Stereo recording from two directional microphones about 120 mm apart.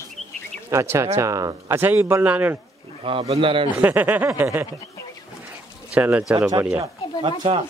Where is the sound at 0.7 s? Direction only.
20° right (ahead or behind).